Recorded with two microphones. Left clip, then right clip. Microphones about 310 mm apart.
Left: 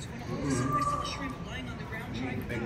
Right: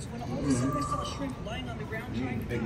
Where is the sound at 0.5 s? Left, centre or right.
Centre.